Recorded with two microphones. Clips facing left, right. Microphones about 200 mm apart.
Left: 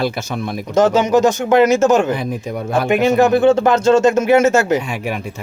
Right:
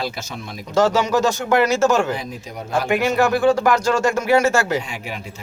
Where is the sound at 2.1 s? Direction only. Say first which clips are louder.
Left 7 dB; 60° left (ahead or behind).